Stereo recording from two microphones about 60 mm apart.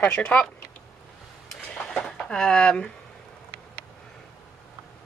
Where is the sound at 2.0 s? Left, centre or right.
Centre.